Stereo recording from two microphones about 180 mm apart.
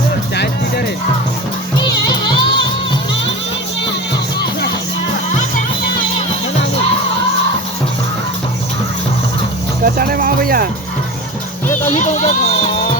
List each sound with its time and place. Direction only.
1.8 s music: 25° left (ahead or behind)
9.8 s music: 55° right (ahead or behind)
11.7 s music: 10° left (ahead or behind)
11.9 s speech: 40° left (ahead or behind)